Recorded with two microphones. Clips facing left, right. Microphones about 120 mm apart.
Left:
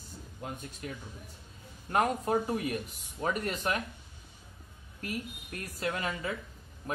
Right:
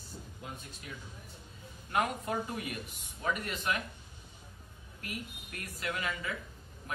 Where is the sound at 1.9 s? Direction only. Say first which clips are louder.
Left 5 dB; 40° left (ahead or behind).